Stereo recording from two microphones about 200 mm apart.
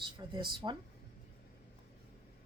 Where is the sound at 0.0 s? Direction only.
20° right (ahead or behind).